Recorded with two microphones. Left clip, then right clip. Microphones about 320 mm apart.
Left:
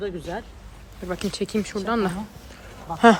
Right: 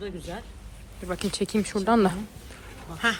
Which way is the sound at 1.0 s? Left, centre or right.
Centre.